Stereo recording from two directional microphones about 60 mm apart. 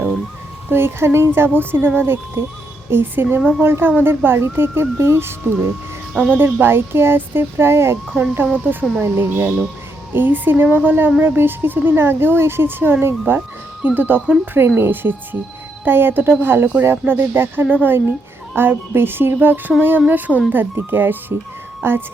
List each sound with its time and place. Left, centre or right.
0.7 s a woman's voice: right
8.1 s speech: right